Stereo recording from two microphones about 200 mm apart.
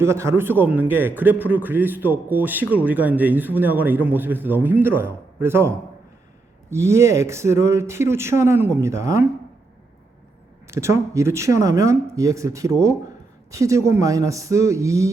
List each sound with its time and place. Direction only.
0.0 s a man's voice: 15° right (ahead or behind)
10.7 s a man's voice: 15° right (ahead or behind)